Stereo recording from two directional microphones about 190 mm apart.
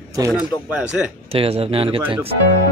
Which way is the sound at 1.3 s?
30° right (ahead or behind).